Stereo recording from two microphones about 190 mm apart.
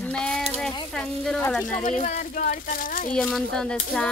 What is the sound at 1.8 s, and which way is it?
Speech, 40° left (ahead or behind).